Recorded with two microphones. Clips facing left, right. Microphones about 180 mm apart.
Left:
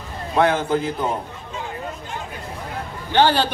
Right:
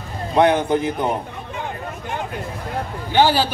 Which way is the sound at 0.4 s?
20° right (ahead or behind).